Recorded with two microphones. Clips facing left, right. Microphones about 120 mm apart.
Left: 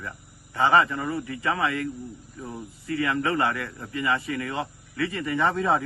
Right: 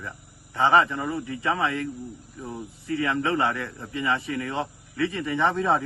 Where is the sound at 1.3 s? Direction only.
20° right (ahead or behind).